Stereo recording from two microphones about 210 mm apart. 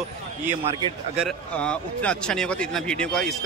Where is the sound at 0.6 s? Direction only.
30° right (ahead or behind).